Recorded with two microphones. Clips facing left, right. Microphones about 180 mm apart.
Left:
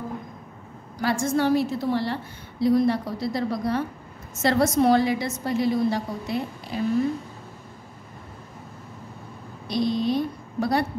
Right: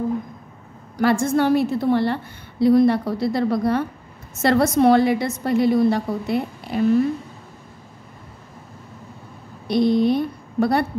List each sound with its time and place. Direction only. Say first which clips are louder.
0.9 s a woman's voice: right 5 dB; 60° right (ahead or behind)
9.7 s a woman's voice: right 6 dB; 55° right (ahead or behind)